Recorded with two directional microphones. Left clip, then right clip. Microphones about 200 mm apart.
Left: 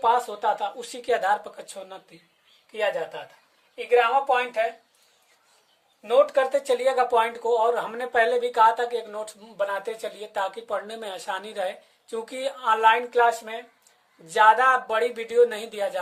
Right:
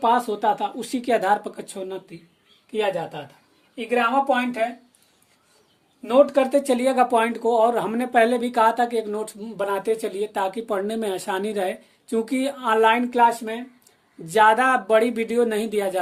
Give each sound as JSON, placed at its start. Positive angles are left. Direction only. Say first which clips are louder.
{"t": 0.0, "sound": "speech", "louder": "right 2 dB", "side_deg": -30}
{"t": 3.8, "sound": "speech", "louder": "even", "side_deg": -25}
{"t": 6.1, "sound": "speech", "louder": "right 3 dB", "side_deg": -30}